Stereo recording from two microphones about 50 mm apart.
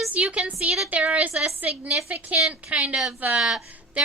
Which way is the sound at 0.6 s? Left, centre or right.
Centre.